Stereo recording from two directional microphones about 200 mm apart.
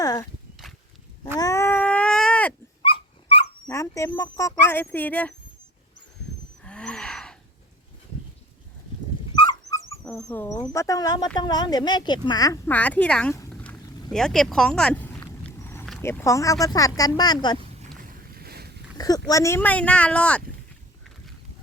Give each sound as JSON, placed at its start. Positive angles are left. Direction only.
{"t": 0.0, "sound": "walk", "side_deg": 20}
{"t": 1.4, "sound": "a sound", "side_deg": 15}
{"t": 2.8, "sound": "dog", "side_deg": 25}
{"t": 3.7, "sound": "speech", "side_deg": 15}
{"t": 6.7, "sound": "wheeze", "side_deg": 5}
{"t": 9.3, "sound": "dog", "side_deg": 20}
{"t": 10.2, "sound": "speech", "side_deg": 10}
{"t": 13.5, "sound": "a sound", "side_deg": 5}
{"t": 16.0, "sound": "speech", "side_deg": 15}
{"t": 18.1, "sound": "boat", "side_deg": -50}
{"t": 18.9, "sound": "speech", "side_deg": 20}